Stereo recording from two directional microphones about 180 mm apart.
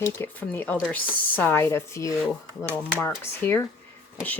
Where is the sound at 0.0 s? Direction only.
15° left (ahead or behind).